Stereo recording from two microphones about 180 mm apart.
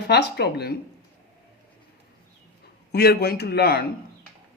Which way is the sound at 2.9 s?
65° left (ahead or behind).